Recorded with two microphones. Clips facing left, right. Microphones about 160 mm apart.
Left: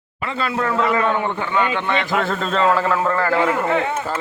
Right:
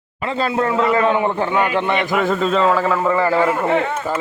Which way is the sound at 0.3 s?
35° right (ahead or behind).